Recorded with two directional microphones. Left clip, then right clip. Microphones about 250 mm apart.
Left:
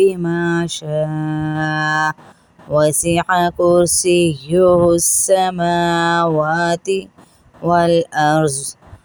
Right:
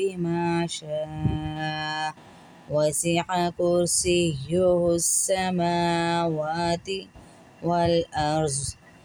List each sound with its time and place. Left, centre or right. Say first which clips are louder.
0.0 s speech: left 11 dB; left